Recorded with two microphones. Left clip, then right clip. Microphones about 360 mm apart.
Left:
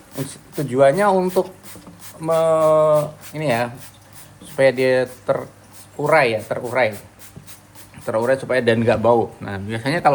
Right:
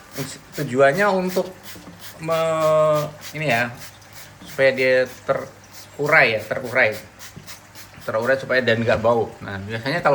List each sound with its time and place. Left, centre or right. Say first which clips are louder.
0.7 s speech: left 2 dB; centre
8.0 s speech: left 1 dB; left